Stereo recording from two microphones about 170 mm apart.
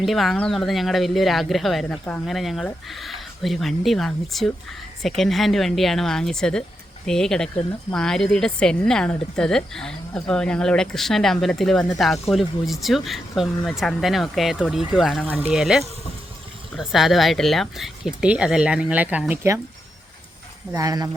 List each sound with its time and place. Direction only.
0.0 s speech: centre (ahead or behind)
20.7 s speech: 20° right (ahead or behind)